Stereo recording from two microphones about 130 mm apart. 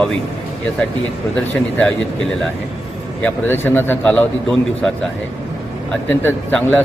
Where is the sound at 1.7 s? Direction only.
5° left (ahead or behind).